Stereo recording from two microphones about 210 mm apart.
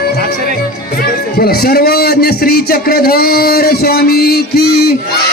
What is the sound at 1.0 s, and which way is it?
A man's voice, 45° left (ahead or behind).